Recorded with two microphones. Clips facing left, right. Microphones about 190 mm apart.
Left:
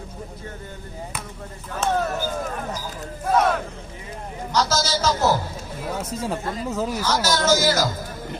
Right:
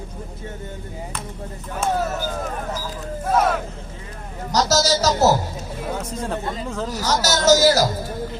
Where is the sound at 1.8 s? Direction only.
10° right (ahead or behind).